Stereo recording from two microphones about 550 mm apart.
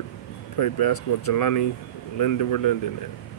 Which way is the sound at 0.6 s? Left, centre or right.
Left.